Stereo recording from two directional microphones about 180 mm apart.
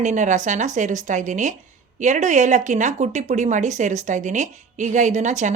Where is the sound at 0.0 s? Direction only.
40° right (ahead or behind).